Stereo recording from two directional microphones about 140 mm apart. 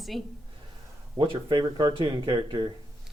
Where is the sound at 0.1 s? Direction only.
Centre (ahead or behind).